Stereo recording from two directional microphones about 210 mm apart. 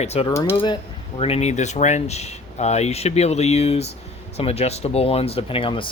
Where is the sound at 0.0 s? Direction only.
30° left (ahead or behind).